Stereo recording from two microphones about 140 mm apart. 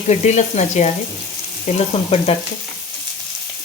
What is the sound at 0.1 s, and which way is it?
Speech, 55° left (ahead or behind).